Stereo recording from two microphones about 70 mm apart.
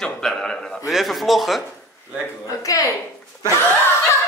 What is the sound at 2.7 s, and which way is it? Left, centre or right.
Speech, left.